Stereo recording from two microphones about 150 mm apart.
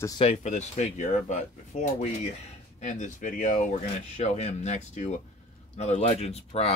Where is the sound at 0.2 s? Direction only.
50° left (ahead or behind).